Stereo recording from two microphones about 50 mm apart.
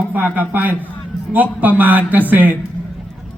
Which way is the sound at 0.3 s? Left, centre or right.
Right.